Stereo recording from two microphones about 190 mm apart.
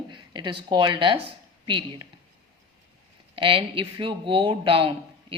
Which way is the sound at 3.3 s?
30° right (ahead or behind).